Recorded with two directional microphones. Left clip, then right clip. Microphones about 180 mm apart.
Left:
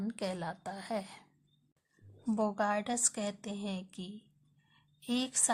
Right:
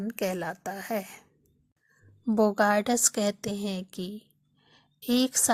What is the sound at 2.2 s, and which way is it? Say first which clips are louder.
A woman's voice: right 9 dB; 25° right (ahead or behind).